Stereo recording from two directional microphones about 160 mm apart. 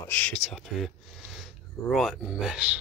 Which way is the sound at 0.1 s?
5° left (ahead or behind).